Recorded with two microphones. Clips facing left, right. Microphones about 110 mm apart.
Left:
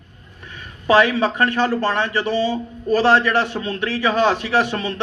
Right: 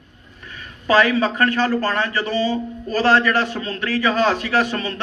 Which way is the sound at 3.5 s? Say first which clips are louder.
Even; 20° left (ahead or behind).